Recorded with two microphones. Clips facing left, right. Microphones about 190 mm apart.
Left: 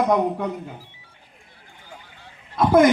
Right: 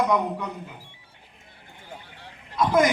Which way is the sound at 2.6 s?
55° left (ahead or behind).